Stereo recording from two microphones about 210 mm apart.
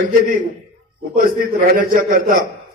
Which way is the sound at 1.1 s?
40° right (ahead or behind).